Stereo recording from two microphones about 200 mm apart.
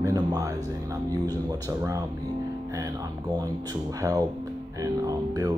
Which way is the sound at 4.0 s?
15° right (ahead or behind).